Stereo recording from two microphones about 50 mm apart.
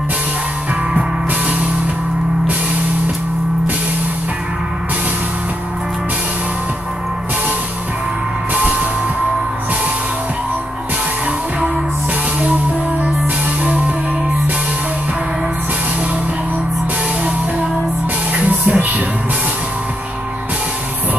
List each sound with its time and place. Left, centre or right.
13.7 s music: right
18.3 s music: right